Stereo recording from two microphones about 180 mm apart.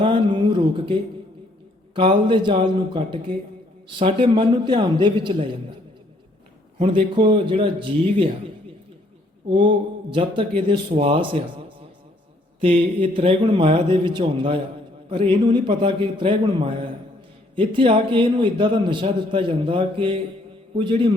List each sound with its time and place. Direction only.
0.0 s a sound: 25° right (ahead or behind)
2.0 s a man's voice: 25° right (ahead or behind)
6.7 s a man's voice: 30° right (ahead or behind)
9.5 s a man's voice: 25° right (ahead or behind)
12.5 s a man's voice: 30° right (ahead or behind)